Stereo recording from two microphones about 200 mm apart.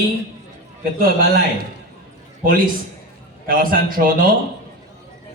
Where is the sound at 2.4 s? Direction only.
45° right (ahead or behind).